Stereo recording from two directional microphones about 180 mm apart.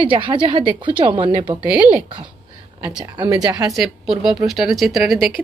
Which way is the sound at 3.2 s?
20° right (ahead or behind).